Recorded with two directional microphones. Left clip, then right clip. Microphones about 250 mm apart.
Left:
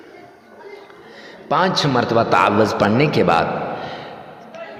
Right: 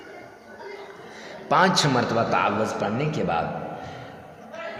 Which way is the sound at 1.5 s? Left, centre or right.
Centre.